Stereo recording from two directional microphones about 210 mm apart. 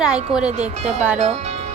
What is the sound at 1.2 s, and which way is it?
Speech, 30° right (ahead or behind).